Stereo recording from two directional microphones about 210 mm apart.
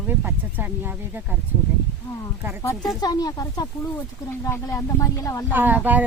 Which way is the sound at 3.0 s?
20° left (ahead or behind).